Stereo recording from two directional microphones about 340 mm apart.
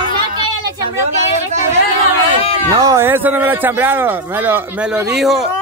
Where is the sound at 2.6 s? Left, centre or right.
Centre.